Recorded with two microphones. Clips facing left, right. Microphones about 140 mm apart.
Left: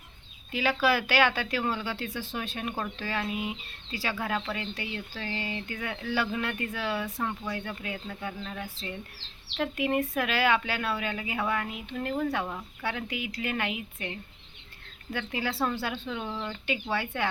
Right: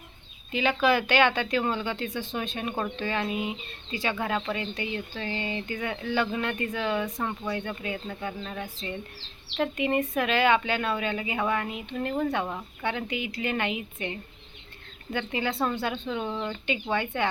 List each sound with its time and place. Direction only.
0.5 s speech: 5° left (ahead or behind)